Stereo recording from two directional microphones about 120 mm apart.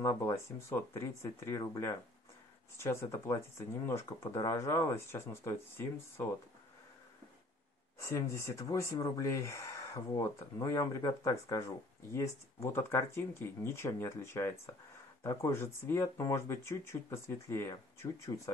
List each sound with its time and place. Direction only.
0.2 s speech: 20° left (ahead or behind)
2.8 s speech: 20° left (ahead or behind)
8.0 s speech: 25° left (ahead or behind)